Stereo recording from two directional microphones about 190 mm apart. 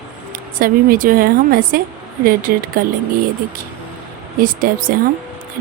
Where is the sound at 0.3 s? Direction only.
50° right (ahead or behind).